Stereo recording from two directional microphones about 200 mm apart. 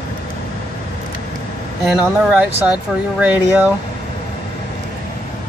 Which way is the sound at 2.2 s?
5° right (ahead or behind).